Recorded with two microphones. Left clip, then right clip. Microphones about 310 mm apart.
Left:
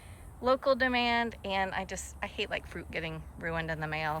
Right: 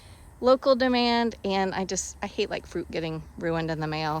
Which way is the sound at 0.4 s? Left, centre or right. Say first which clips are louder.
Right 6 dB; centre.